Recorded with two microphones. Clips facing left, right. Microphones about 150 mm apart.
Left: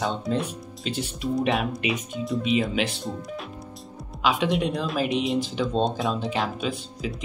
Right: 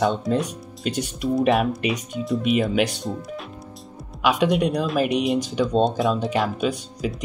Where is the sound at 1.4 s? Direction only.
45° right (ahead or behind).